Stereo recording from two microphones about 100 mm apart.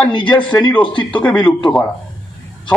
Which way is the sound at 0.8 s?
55° left (ahead or behind).